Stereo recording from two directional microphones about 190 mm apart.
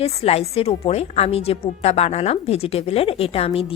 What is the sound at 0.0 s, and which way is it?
A woman's voice, 35° left (ahead or behind).